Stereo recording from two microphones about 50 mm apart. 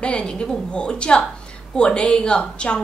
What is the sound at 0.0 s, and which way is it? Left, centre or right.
A woman's voice, left.